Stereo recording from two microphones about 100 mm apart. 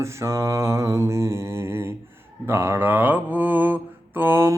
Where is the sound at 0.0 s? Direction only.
30° right (ahead or behind).